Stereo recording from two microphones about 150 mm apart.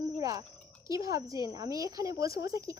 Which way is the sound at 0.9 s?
20° right (ahead or behind).